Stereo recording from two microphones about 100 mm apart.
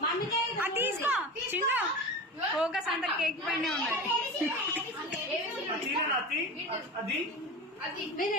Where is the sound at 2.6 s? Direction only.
5° right (ahead or behind).